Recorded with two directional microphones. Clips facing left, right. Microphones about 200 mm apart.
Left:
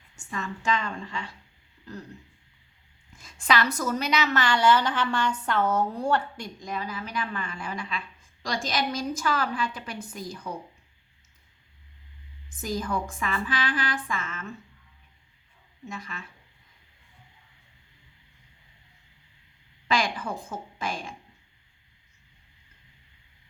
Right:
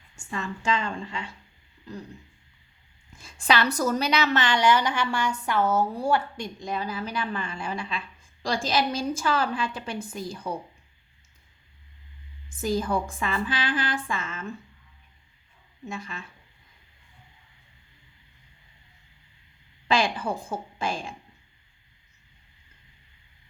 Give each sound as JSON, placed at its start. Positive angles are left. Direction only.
{"t": 0.3, "sound": "a woman's voice", "side_deg": -30}
{"t": 1.8, "sound": "speech", "side_deg": -15}
{"t": 3.2, "sound": "a woman's voice", "side_deg": -30}
{"t": 6.3, "sound": "a woman's voice", "side_deg": -25}
{"t": 12.6, "sound": "a woman's voice", "side_deg": -30}
{"t": 15.9, "sound": "a woman's voice", "side_deg": -30}
{"t": 19.9, "sound": "a woman's voice", "side_deg": -30}